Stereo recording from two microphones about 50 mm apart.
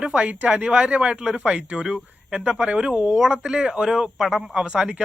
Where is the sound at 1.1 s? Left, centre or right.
Centre.